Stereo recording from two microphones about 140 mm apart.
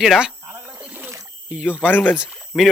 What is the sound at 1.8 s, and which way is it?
Speech, 10° left (ahead or behind).